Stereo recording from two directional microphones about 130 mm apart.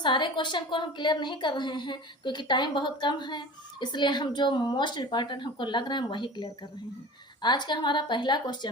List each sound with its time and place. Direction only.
0.0 s a woman's voice: 35° left (ahead or behind)